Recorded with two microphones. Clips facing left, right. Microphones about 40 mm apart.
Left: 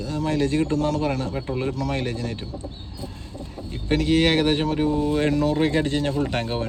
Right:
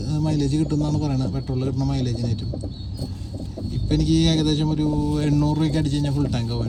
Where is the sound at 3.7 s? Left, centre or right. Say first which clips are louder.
Even; left.